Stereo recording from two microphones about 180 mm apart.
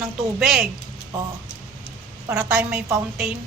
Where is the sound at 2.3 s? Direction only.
5° right (ahead or behind).